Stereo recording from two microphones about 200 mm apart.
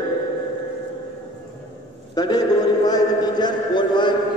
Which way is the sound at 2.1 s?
20° left (ahead or behind).